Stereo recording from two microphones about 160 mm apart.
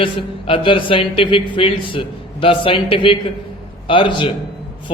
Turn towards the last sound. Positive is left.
turn(degrees=30)  # may be behind; listen again after turning